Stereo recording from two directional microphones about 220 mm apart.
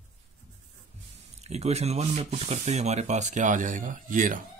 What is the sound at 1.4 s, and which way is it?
Speech, 30° right (ahead or behind).